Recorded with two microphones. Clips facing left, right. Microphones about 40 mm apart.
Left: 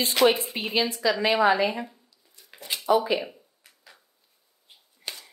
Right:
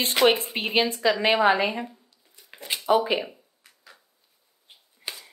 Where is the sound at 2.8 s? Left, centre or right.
Right.